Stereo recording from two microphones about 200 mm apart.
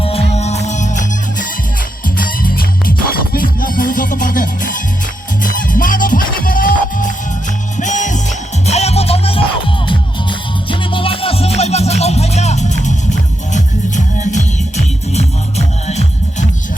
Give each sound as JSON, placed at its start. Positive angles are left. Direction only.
{"t": 0.0, "sound": "music", "side_deg": 30}